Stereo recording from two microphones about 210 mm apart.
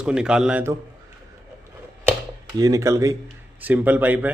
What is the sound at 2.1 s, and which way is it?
Speech, 15° right (ahead or behind).